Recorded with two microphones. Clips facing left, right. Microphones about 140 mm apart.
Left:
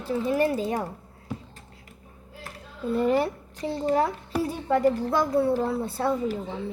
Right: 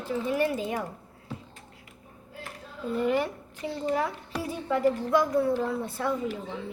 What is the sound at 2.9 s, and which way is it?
A woman's voice, 35° left (ahead or behind).